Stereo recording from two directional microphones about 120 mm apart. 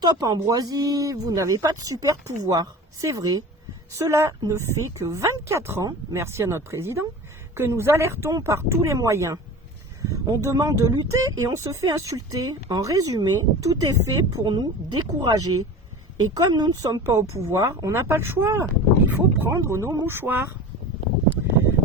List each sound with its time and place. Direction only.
0.0 s speech: 35° right (ahead or behind); by 20.5 s 15° right (ahead or behind)